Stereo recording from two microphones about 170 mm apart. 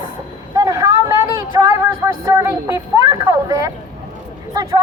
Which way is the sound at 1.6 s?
15° right (ahead or behind).